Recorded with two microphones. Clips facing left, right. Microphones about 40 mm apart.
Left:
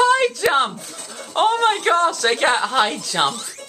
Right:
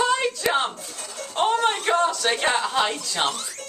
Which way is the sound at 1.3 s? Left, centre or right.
Left.